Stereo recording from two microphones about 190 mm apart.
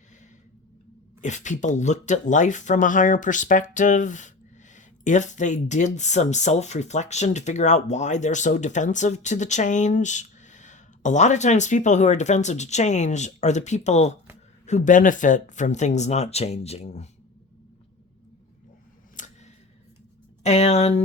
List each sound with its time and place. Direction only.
1.2 s speech: 40° left (ahead or behind)
19.1 s a sound: 40° left (ahead or behind)
20.4 s speech: 35° left (ahead or behind)